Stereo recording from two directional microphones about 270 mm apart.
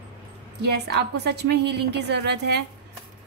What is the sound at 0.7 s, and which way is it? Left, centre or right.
A woman's voice, right.